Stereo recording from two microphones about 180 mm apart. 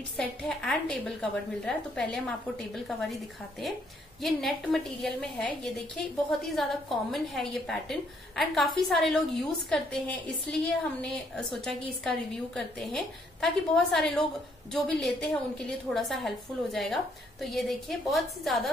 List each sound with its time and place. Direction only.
0.2 s a woman's voice: 5° left (ahead or behind)
4.2 s a woman's voice: centre (ahead or behind)